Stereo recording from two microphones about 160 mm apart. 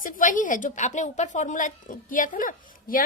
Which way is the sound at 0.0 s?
55° left (ahead or behind).